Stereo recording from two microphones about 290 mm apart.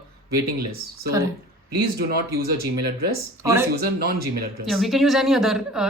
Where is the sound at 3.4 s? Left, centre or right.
Centre.